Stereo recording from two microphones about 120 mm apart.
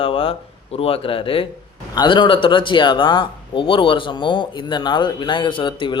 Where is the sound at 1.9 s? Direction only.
35° left (ahead or behind).